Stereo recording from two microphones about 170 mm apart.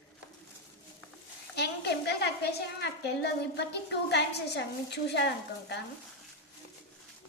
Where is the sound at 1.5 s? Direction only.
75° left (ahead or behind).